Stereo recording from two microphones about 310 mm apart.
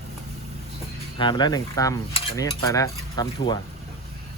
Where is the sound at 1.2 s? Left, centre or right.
Centre.